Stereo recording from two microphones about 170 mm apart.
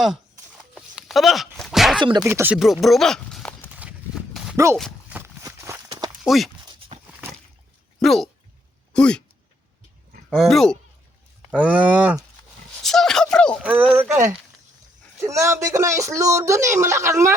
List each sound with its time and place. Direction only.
0.7 s a sound: centre (ahead or behind)
2.0 s speech: 25° right (ahead or behind)
2.2 s speech: 10° right (ahead or behind)
2.6 s speech: centre (ahead or behind)
3.8 s horse: 5° right (ahead or behind)
4.5 s speech: 15° right (ahead or behind)
5.0 s a sound: 10° right (ahead or behind)
5.4 s clip-clop: 20° right (ahead or behind)
6.2 s speech: centre (ahead or behind)
6.7 s a sound: 30° right (ahead or behind)
8.0 s speech: centre (ahead or behind)
10.2 s speech: centre (ahead or behind)
12.8 s a sound: centre (ahead or behind)
13.6 s speech: 10° right (ahead or behind)